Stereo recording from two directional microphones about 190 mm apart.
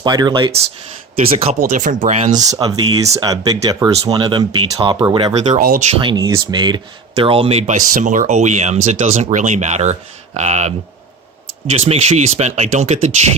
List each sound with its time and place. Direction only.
0.0 s speech: 20° right (ahead or behind)
1.3 s speech: 35° right (ahead or behind)
2.3 s speech: 20° right (ahead or behind)
5.5 s speech: 45° right (ahead or behind)
5.9 s speech: 25° right (ahead or behind)